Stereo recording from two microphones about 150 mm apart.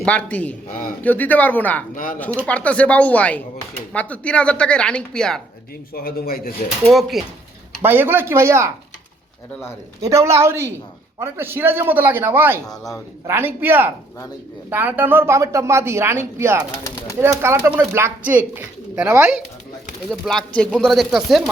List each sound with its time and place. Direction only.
0.0 s a woman's voice: 10° left (ahead or behind)
0.7 s a man's voice: 70° left (ahead or behind)
1.0 s a woman's voice: 10° left (ahead or behind)
5.9 s a man's voice: 80° left
6.8 s speech: centre (ahead or behind)
7.8 s speech: 15° right (ahead or behind)
10.0 s speech: 20° right (ahead or behind)
12.6 s speech: centre (ahead or behind)
13.2 s speech: 15° right (ahead or behind)
16.8 s speech: 20° left (ahead or behind)
17.2 s speech: 15° right (ahead or behind)
20.1 s speech: centre (ahead or behind)